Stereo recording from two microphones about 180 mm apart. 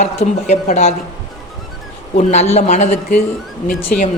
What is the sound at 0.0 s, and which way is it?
Speech, 35° left (ahead or behind).